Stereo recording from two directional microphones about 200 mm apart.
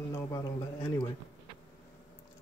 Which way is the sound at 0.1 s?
15° left (ahead or behind).